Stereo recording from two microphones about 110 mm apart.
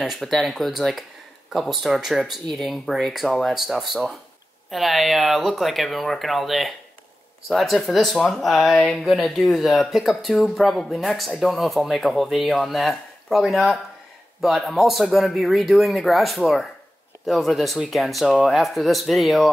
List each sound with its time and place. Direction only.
0.0 s speech: centre (ahead or behind)